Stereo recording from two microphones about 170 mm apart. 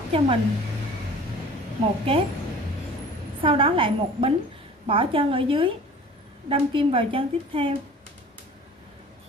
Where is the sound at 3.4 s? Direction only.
30° right (ahead or behind).